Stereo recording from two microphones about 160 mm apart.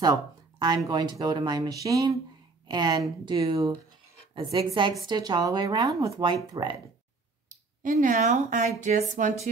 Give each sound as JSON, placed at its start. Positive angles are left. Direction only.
{"t": 0.0, "sound": "a woman's voice", "side_deg": -25}
{"t": 7.4, "sound": "speech", "side_deg": -55}